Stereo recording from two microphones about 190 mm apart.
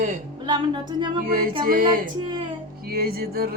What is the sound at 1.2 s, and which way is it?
Speech, 50° right (ahead or behind).